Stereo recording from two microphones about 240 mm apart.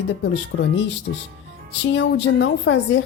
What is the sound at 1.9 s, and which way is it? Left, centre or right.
A woman's voice, left.